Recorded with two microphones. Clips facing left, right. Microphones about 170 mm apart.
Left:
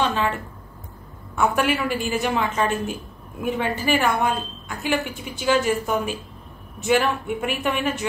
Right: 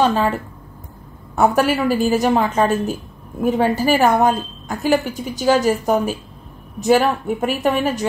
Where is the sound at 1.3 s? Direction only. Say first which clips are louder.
Right 5 dB; 40° right (ahead or behind).